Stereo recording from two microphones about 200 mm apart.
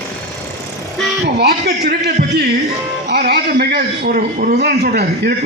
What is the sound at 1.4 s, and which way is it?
Speech, 55° right (ahead or behind).